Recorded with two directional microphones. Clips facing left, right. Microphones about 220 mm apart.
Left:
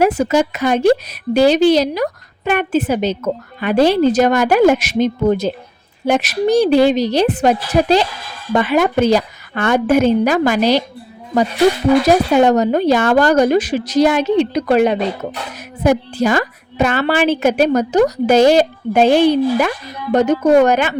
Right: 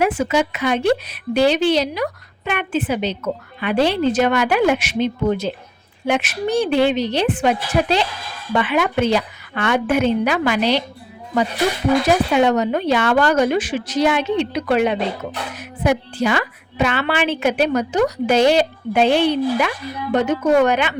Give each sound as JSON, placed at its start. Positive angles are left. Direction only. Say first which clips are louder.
{"t": 0.0, "sound": "speech", "louder": "left 4 dB", "side_deg": 40}
{"t": 12.0, "sound": "speech", "louder": "left 4 dB", "side_deg": 40}